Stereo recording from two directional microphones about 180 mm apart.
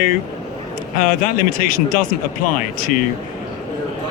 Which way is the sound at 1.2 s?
55° left (ahead or behind).